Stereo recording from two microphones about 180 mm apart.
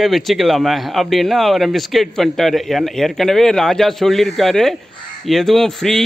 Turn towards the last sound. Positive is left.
turn(degrees=0)  # may be behind; listen again after turning